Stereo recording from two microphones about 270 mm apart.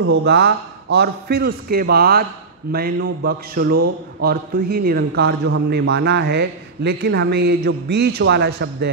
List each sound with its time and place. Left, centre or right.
0.1 s a man's voice: right